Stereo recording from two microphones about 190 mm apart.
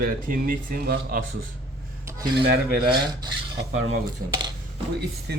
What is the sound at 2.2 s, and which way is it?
Cutlery, 25° right (ahead or behind).